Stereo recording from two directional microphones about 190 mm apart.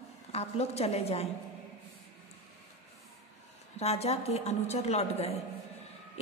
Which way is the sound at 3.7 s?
35° left (ahead or behind).